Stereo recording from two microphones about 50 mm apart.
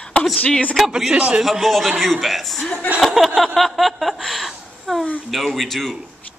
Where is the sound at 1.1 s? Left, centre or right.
Right.